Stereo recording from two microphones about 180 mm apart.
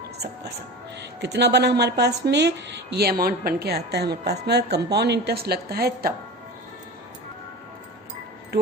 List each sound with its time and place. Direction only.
1.2 s a woman's voice: 70° right (ahead or behind)